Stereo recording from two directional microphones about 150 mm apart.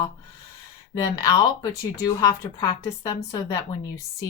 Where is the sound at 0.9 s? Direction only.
25° left (ahead or behind).